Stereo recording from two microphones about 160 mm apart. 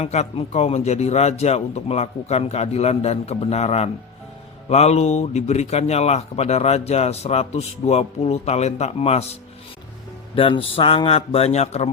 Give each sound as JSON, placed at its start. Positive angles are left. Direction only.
{"t": 0.0, "sound": "speech", "side_deg": 40}
{"t": 10.3, "sound": "speech", "side_deg": 35}